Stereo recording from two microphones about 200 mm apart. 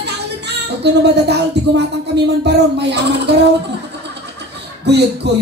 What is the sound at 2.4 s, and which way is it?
Speech, 55° right (ahead or behind).